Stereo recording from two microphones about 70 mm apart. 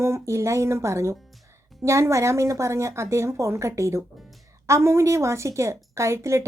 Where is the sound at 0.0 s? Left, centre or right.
Right.